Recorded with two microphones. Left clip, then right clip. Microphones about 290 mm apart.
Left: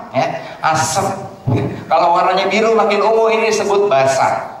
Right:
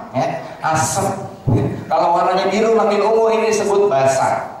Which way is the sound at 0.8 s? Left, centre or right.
Centre.